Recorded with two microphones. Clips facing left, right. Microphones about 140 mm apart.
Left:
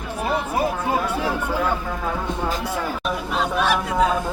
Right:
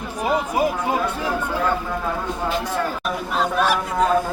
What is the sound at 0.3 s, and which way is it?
Speech, 15° right (ahead or behind).